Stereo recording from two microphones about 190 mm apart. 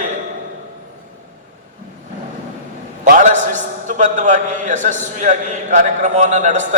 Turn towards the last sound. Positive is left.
turn(degrees=-40)  # may be behind; listen again after turning